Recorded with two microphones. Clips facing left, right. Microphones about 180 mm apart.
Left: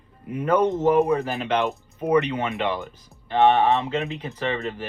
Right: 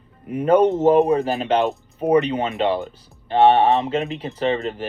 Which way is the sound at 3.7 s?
25° right (ahead or behind).